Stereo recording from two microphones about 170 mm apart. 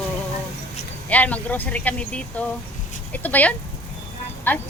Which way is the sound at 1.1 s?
10° left (ahead or behind).